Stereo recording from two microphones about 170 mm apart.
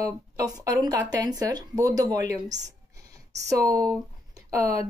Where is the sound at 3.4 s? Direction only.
20° right (ahead or behind).